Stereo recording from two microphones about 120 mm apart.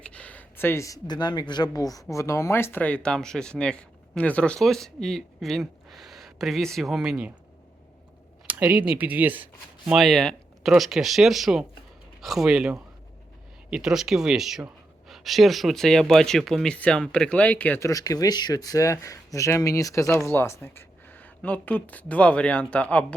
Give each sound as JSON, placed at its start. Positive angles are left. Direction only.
{"t": 0.0, "sound": "speech", "side_deg": 10}
{"t": 8.4, "sound": "speech", "side_deg": -10}
{"t": 9.9, "sound": "speech", "side_deg": 0}
{"t": 17.7, "sound": "speech", "side_deg": 25}